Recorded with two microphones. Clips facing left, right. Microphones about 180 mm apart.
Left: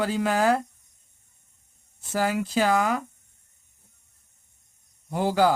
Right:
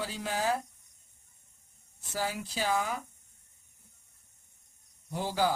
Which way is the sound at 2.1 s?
90° left.